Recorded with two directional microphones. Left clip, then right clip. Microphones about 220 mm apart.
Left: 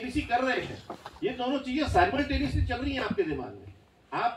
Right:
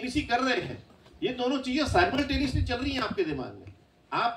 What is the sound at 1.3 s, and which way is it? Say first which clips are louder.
Speech: right 3 dB; 20° right (ahead or behind).